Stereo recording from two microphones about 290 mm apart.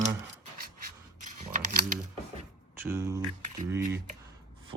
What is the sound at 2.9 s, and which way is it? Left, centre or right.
Speech, centre.